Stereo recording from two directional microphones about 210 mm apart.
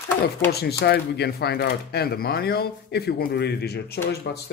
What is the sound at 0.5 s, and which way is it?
Speech, 50° left (ahead or behind).